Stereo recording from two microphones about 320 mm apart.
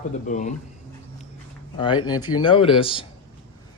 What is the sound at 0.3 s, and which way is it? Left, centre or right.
Speech, left.